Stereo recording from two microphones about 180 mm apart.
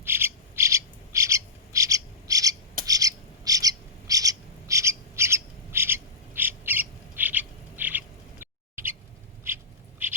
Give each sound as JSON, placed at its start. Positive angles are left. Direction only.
{"t": 0.0, "sound": "bird", "side_deg": -15}